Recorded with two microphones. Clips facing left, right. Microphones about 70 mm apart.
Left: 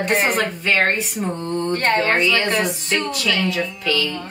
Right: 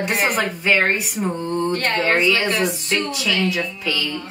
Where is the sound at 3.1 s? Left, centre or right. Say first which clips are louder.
Even; centre.